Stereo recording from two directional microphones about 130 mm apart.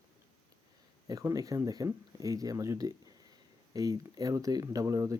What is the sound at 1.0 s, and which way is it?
Speech, 25° right (ahead or behind).